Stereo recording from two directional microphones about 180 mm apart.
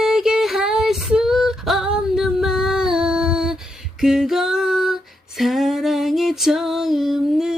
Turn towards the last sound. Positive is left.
turn(degrees=-5)  # may be behind; listen again after turning